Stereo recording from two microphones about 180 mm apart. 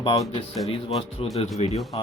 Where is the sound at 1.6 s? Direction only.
35° left (ahead or behind).